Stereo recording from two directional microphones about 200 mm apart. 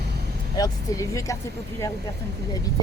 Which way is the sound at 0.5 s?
15° left (ahead or behind).